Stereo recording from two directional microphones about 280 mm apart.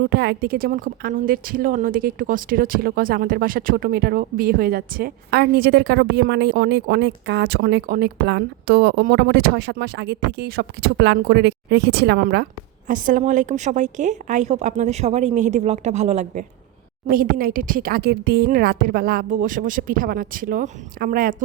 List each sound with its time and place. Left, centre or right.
0.1 s a woman's voice: right